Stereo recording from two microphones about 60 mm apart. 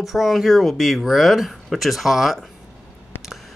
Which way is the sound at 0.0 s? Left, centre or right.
Centre.